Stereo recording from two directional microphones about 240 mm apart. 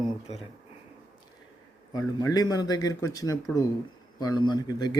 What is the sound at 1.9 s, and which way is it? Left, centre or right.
A man's voice, centre.